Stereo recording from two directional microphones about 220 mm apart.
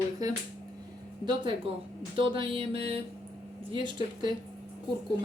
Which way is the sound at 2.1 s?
25° right (ahead or behind).